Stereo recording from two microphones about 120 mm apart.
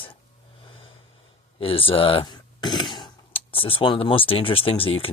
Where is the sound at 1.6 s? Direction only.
50° left (ahead or behind).